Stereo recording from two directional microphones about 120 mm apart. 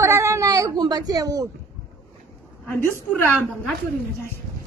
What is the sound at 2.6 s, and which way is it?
Speech, 15° left (ahead or behind).